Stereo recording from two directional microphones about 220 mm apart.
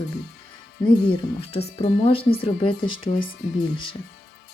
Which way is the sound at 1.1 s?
25° left (ahead or behind).